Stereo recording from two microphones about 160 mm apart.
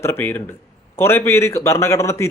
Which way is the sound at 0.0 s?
15° left (ahead or behind).